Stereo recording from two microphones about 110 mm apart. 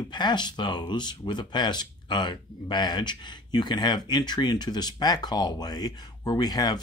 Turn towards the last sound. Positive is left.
turn(degrees=40)  # may be behind; listen again after turning